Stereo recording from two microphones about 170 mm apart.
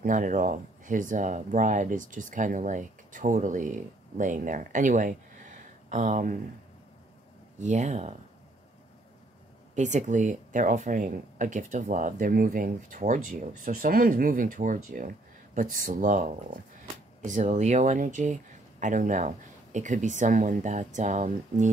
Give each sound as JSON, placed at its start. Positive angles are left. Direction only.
{"t": 0.0, "sound": "speech", "side_deg": -50}
{"t": 7.6, "sound": "speech", "side_deg": -45}
{"t": 9.8, "sound": "speech", "side_deg": -45}